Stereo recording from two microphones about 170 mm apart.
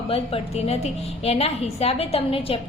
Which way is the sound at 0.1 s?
35° left (ahead or behind).